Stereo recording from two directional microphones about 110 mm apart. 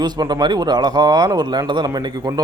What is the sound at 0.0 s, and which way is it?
A man's voice, 40° right (ahead or behind).